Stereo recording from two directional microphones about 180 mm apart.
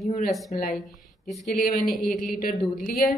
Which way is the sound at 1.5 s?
55° left (ahead or behind).